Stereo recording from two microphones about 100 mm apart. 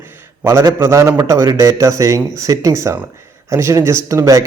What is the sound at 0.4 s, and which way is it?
A man's voice, 30° right (ahead or behind).